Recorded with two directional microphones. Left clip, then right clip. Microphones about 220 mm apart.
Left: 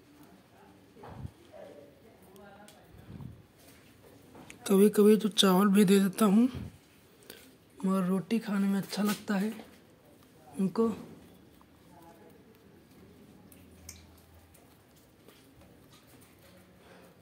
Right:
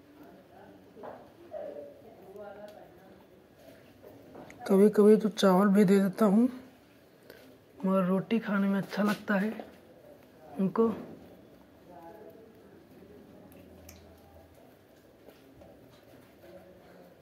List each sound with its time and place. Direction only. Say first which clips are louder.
4.6 s a woman's voice: right 2 dB; 25° left (ahead or behind)
7.8 s speech: right 4 dB; 30° left (ahead or behind)
10.6 s speech: right 2 dB; 30° left (ahead or behind)